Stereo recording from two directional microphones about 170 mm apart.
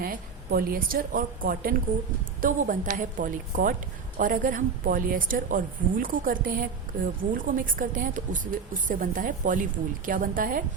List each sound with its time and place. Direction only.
0.0 s a woman's voice: 55° right (ahead or behind)